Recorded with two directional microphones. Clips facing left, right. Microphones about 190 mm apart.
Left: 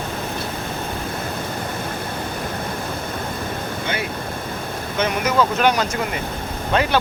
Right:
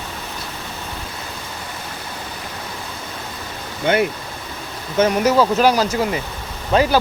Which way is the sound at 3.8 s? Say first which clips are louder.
Right 11 dB; 60° right (ahead or behind).